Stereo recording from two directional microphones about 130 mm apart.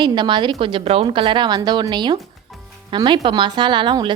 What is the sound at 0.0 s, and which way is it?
A woman's voice, 35° right (ahead or behind).